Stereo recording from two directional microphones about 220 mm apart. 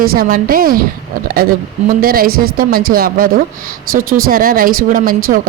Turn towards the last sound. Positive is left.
turn(degrees=-40)  # may be behind; listen again after turning